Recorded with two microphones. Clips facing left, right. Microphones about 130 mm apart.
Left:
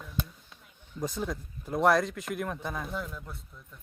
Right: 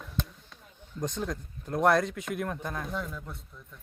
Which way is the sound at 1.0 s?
5° left (ahead or behind).